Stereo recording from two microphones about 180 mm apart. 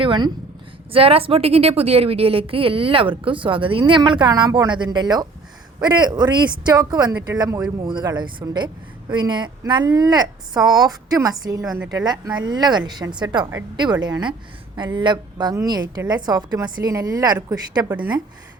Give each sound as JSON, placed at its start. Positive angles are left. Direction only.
{"t": 0.0, "sound": "a woman's voice", "side_deg": -25}
{"t": 11.6, "sound": "a woman's voice", "side_deg": -5}
{"t": 11.9, "sound": "a woman's voice", "side_deg": -20}